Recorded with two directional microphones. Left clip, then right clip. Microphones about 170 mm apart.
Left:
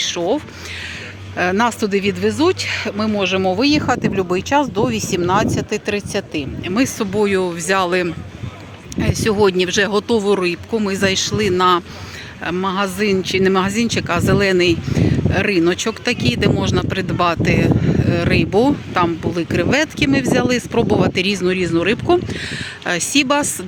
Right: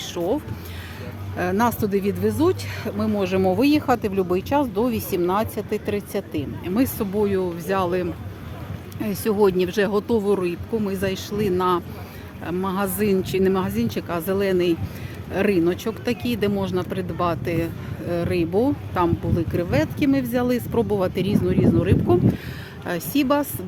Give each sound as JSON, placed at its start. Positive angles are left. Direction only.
{"t": 0.0, "sound": "a sound", "side_deg": 10}
{"t": 1.4, "sound": "speech", "side_deg": 15}
{"t": 3.2, "sound": "speech", "side_deg": 0}
{"t": 7.2, "sound": "speech", "side_deg": 15}
{"t": 13.5, "sound": "speech", "side_deg": 10}